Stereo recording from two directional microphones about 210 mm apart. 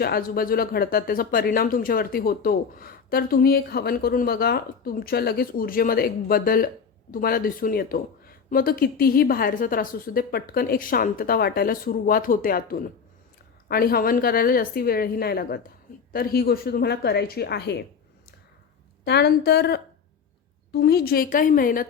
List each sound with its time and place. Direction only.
0.0 s speech: 45° left (ahead or behind)
19.0 s speech: 50° left (ahead or behind)